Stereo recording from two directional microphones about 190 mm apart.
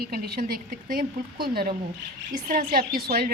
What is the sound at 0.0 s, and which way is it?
A woman's voice, 55° right (ahead or behind).